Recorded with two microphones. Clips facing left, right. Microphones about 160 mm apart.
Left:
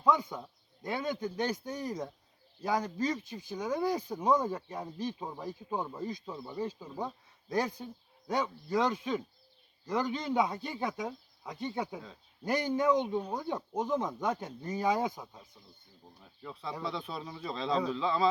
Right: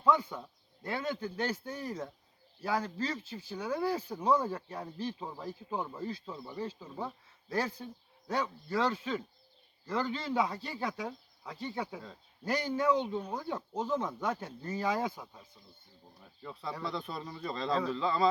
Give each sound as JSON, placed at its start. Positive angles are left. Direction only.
{"t": 0.0, "sound": "speech", "side_deg": 15}
{"t": 6.3, "sound": "speech", "side_deg": 0}
{"t": 16.2, "sound": "speech", "side_deg": 0}